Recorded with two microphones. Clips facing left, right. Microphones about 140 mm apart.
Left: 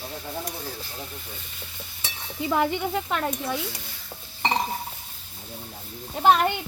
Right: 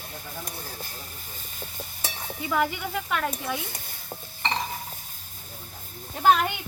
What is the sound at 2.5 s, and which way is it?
Speech, 30° left (ahead or behind).